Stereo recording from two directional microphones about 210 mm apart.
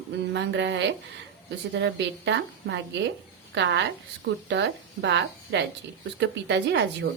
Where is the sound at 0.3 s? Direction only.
55° right (ahead or behind).